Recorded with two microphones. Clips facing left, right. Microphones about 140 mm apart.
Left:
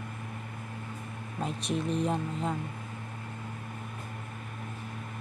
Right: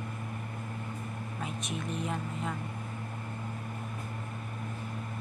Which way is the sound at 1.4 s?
35° left (ahead or behind).